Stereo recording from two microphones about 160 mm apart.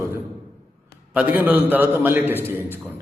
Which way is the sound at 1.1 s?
10° right (ahead or behind).